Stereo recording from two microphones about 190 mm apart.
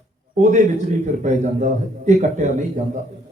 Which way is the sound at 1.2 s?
40° right (ahead or behind).